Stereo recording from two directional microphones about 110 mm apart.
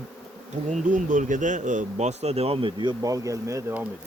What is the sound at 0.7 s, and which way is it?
Bee, 90° right.